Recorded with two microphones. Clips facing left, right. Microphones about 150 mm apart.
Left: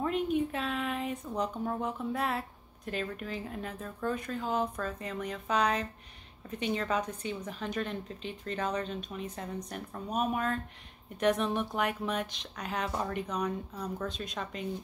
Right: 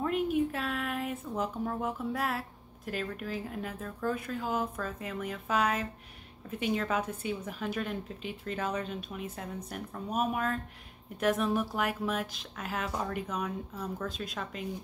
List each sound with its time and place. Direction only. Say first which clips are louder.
0.0 s a woman's voice: right 1 dB; 5° right (ahead or behind)